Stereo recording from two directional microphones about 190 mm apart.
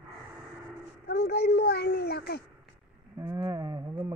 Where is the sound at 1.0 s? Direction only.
60° left (ahead or behind).